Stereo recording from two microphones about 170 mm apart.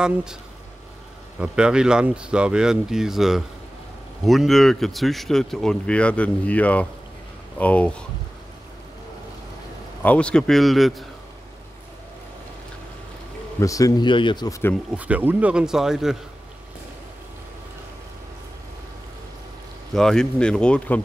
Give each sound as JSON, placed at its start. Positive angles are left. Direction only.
{"t": 0.0, "sound": "speech", "side_deg": -5}
{"t": 1.4, "sound": "speech", "side_deg": -5}
{"t": 10.0, "sound": "speech", "side_deg": 5}
{"t": 13.6, "sound": "a man's voice", "side_deg": 20}
{"t": 15.0, "sound": "speech", "side_deg": -10}
{"t": 19.9, "sound": "speech", "side_deg": 5}